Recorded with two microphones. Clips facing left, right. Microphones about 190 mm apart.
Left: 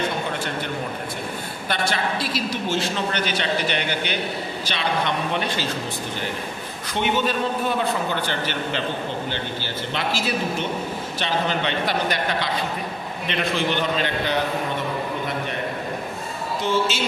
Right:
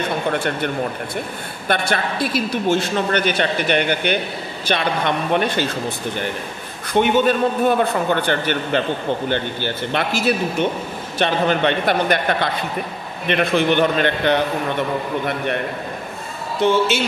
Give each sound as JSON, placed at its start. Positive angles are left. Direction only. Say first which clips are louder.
{"t": 1.7, "sound": "a man's voice", "louder": "right 4 dB", "side_deg": -55}
{"t": 6.9, "sound": "a man's voice", "louder": "right 7 dB", "side_deg": -55}
{"t": 16.6, "sound": "a man's voice", "louder": "right 6 dB", "side_deg": -60}